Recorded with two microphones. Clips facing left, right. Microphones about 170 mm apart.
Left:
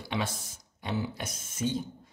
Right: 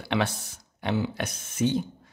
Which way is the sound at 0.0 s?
70° right (ahead or behind).